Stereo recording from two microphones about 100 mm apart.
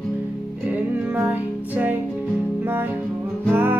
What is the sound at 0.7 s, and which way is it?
Music, 15° right (ahead or behind).